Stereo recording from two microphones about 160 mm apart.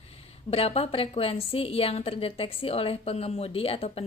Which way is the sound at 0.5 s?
40° left (ahead or behind).